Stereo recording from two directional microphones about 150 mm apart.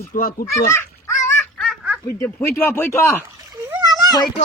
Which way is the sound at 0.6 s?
20° left (ahead or behind).